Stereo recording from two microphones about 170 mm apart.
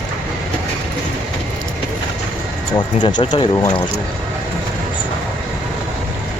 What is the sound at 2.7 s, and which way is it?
Speech, 25° left (ahead or behind).